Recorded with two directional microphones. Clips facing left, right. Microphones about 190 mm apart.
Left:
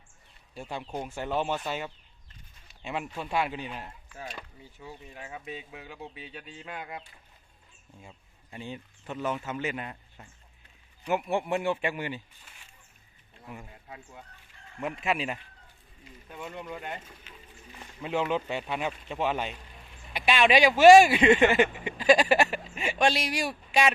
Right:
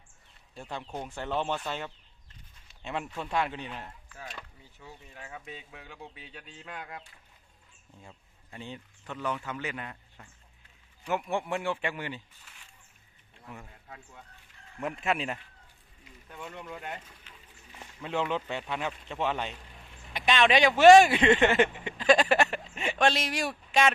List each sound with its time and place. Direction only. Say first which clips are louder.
0.5 s speech: left 2 dB; 10° left (ahead or behind)
8.0 s speech: even; 15° left (ahead or behind)
13.4 s speech: left 2 dB; 10° left (ahead or behind)
18.0 s speech: left 2 dB; 10° left (ahead or behind)